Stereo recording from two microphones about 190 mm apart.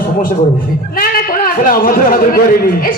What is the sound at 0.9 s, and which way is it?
A man's voice, 50° left (ahead or behind).